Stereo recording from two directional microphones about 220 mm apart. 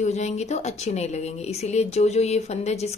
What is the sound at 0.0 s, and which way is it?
A woman's voice, 30° left (ahead or behind).